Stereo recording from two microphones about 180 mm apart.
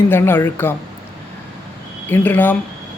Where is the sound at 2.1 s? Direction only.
10° left (ahead or behind).